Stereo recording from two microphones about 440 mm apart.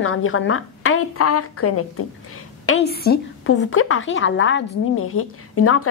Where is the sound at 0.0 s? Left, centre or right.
Left.